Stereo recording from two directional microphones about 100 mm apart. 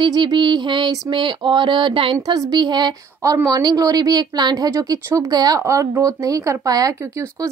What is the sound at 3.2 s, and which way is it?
Speech, 35° right (ahead or behind).